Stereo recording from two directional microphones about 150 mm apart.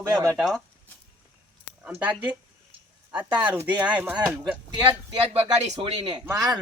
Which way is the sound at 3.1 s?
10° right (ahead or behind).